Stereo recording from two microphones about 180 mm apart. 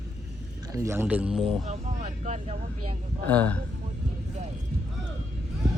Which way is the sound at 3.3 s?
10° left (ahead or behind).